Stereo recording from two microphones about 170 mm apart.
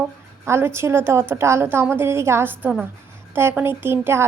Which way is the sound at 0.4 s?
15° right (ahead or behind).